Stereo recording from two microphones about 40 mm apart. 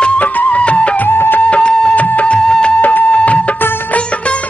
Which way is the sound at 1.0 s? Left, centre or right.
Left.